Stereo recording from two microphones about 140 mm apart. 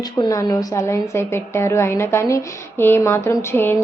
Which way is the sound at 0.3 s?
25° left (ahead or behind).